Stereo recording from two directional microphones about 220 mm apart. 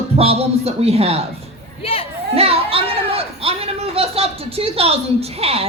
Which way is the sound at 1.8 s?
25° left (ahead or behind).